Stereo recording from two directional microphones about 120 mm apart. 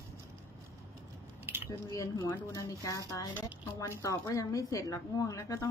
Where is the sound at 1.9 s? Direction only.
30° left (ahead or behind).